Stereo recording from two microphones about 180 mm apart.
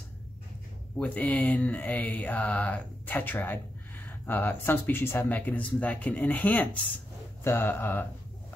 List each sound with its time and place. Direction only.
0.9 s speech: 5° left (ahead or behind)